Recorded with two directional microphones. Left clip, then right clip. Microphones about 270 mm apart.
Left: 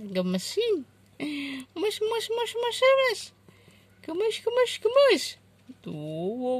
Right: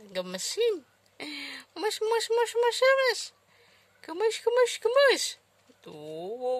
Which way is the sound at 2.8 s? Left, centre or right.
Centre.